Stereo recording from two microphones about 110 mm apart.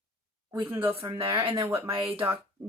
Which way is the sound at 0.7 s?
20° right (ahead or behind).